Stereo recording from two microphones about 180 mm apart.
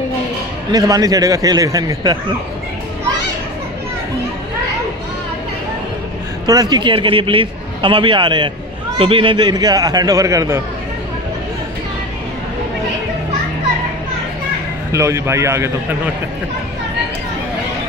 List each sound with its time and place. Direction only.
0.7 s a man's voice: 20° right (ahead or behind)
6.4 s a man's voice: 20° right (ahead or behind)
14.9 s speech: 15° right (ahead or behind)